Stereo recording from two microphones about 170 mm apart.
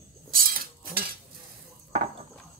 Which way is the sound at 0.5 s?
60° right (ahead or behind).